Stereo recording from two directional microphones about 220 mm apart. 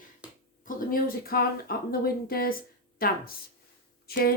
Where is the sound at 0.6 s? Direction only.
40° left (ahead or behind).